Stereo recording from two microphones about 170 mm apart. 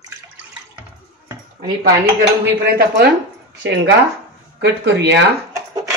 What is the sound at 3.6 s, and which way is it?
Speech, 90° right.